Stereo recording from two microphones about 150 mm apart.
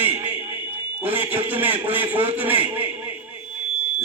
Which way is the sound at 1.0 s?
10° right (ahead or behind).